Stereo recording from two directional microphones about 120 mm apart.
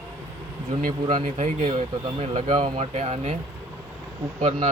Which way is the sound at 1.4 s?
75° right (ahead or behind).